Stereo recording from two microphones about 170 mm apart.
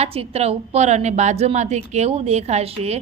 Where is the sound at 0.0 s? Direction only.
35° right (ahead or behind).